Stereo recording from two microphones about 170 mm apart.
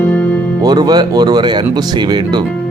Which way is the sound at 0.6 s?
25° right (ahead or behind).